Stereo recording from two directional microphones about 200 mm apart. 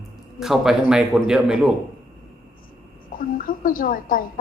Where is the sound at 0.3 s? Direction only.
Centre (ahead or behind).